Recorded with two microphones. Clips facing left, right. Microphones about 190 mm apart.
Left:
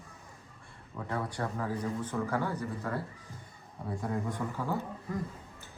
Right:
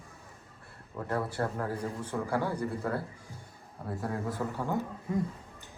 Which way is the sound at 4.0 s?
5° right (ahead or behind).